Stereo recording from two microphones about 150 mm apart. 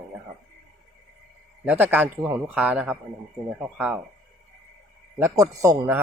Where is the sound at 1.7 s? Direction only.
10° right (ahead or behind).